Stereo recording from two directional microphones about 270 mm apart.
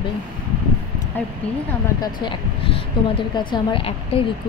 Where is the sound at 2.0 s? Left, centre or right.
Centre.